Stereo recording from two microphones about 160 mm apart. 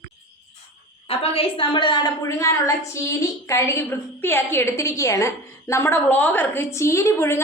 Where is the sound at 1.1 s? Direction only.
35° left (ahead or behind).